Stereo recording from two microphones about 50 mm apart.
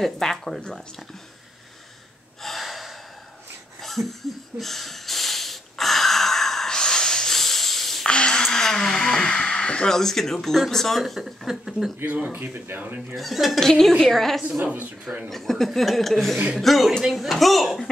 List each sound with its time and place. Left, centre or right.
0.0 s speech: centre
2.4 s gasp: centre
3.8 s a sound: centre
8.1 s a sound: centre
9.8 s speech: centre
12.3 s speech: right
13.1 s speech: centre
14.6 s speech: right
15.2 s speech: centre